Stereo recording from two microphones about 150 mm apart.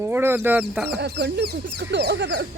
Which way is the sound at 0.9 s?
90° right.